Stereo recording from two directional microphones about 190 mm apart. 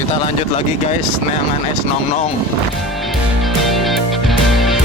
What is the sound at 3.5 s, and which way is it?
Music, centre (ahead or behind).